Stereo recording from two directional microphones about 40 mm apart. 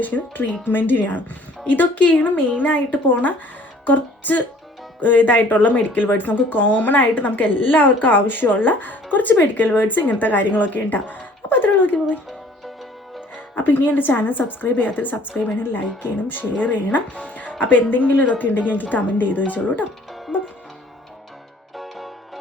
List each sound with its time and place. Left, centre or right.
0.0 s speech: left
3.8 s music: left
4.9 s speech: left
13.3 s speech: left
17.6 s speech: left
20.3 s music: right
21.8 s music: centre